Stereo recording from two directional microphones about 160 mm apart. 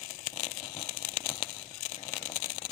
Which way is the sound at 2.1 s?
30° left (ahead or behind).